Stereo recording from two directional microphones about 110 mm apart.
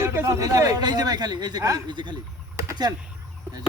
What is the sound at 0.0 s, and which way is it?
Speech, 25° right (ahead or behind).